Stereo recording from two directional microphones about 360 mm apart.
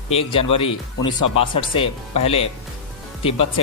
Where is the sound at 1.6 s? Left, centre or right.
Centre.